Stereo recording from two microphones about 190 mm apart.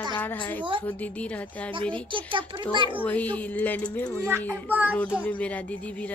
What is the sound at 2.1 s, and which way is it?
Speech, 25° right (ahead or behind).